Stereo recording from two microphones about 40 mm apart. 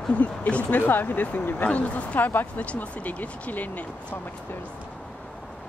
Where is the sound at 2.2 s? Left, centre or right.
Left.